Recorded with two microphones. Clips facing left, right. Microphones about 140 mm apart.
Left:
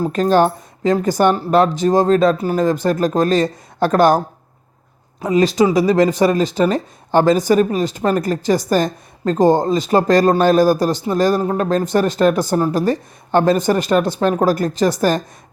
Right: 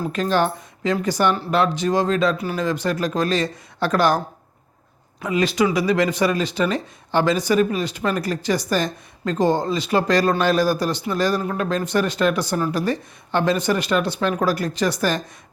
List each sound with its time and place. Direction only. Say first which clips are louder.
0.0 s speech: left 6 dB; 40° left (ahead or behind)
5.2 s speech: left 5 dB; 40° left (ahead or behind)